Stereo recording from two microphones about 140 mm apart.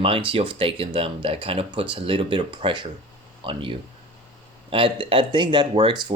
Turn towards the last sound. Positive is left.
turn(degrees=-35)  # may be behind; listen again after turning